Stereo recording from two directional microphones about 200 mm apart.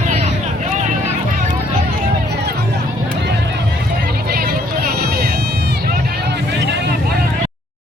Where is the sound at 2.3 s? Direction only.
55° right (ahead or behind).